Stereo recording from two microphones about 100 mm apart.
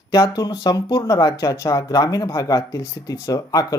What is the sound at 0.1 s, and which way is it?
Speech, 40° left (ahead or behind).